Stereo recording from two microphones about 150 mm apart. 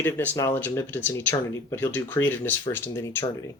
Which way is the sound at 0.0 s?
10° left (ahead or behind).